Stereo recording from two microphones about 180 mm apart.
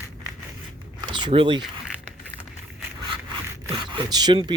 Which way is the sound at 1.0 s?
25° right (ahead or behind).